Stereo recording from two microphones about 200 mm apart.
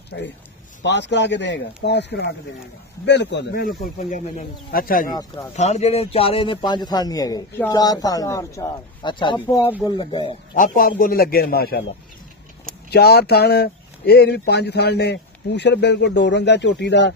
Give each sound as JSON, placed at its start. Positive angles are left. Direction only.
{"t": 0.8, "sound": "speech", "side_deg": 60}
{"t": 3.6, "sound": "speech", "side_deg": 40}
{"t": 5.6, "sound": "a man's voice", "side_deg": 35}
{"t": 10.5, "sound": "speech", "side_deg": 40}
{"t": 12.9, "sound": "speech", "side_deg": 55}